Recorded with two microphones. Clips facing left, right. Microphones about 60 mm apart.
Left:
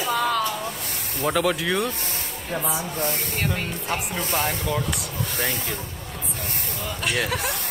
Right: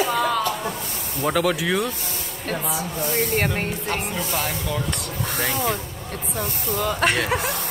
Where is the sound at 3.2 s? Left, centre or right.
Right.